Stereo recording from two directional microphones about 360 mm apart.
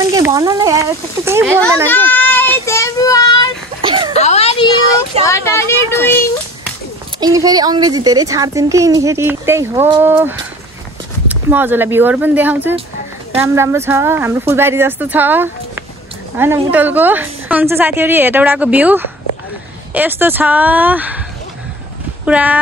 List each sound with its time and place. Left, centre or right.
0.1 s speech: centre
1.9 s child singing: centre
3.8 s a sound: centre
4.2 s a sound: centre
5.2 s a child's voice: centre
7.2 s a woman's voice: centre
22.2 s speech: centre